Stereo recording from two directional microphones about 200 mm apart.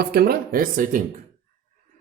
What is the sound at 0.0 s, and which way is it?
Speech, 50° right (ahead or behind).